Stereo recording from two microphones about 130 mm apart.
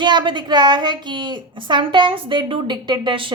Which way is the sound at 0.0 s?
35° right (ahead or behind).